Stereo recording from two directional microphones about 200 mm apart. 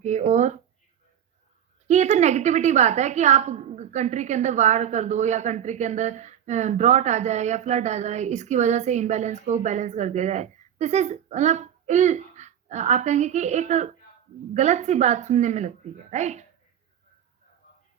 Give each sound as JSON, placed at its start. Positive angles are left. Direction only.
{"t": 0.0, "sound": "speech", "side_deg": -35}
{"t": 1.9, "sound": "a woman's voice", "side_deg": -35}